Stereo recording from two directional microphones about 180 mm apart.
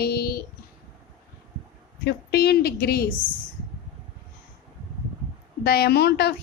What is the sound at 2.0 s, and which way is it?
A woman's voice, 60° left (ahead or behind).